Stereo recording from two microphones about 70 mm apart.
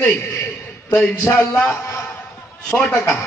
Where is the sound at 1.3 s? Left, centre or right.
Left.